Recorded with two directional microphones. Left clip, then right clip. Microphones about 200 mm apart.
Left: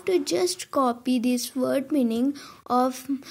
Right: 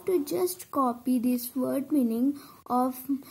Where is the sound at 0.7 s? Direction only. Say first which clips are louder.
Left 4 dB; 35° left (ahead or behind).